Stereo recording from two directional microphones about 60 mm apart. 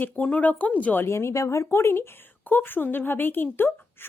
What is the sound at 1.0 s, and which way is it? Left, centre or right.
Speech, left.